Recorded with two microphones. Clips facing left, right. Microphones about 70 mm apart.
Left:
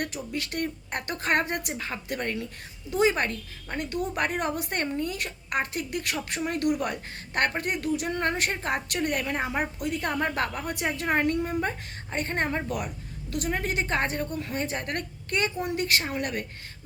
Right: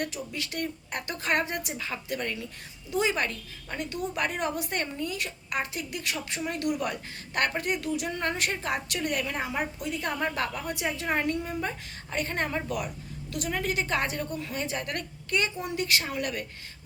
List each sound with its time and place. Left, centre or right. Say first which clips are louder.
0.0 s a woman's voice: left 1 dB; left